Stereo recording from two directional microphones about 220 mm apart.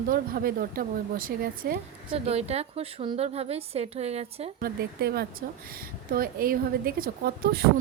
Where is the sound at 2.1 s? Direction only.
30° right (ahead or behind).